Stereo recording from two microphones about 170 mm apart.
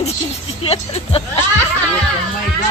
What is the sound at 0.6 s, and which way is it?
Speech, 35° left (ahead or behind).